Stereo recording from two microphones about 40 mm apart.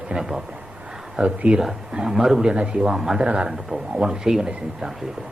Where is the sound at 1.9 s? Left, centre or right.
Centre.